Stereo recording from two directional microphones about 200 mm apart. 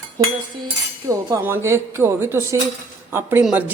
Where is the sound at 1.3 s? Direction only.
15° right (ahead or behind).